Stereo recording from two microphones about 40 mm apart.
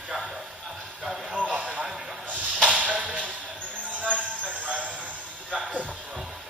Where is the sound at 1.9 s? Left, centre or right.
Centre.